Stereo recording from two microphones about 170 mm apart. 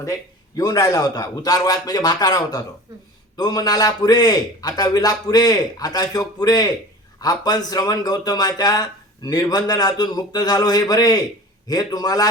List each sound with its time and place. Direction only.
0.0 s a man's voice: 20° left (ahead or behind)